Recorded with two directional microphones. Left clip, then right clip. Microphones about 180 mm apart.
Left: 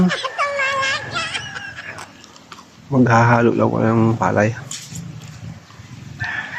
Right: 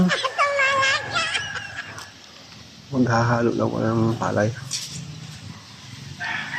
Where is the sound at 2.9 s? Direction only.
25° left (ahead or behind).